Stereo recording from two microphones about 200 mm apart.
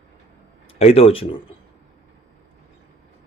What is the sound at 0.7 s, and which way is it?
Speech, 30° left (ahead or behind).